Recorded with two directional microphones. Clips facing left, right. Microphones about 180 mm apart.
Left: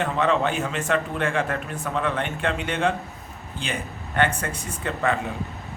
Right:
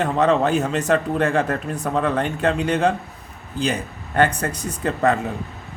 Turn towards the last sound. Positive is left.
turn(degrees=-40)  # may be behind; listen again after turning